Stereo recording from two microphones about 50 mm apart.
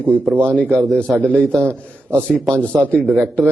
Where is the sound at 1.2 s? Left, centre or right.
Left.